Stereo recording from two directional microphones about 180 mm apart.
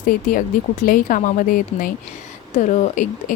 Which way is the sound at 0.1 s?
50° left (ahead or behind).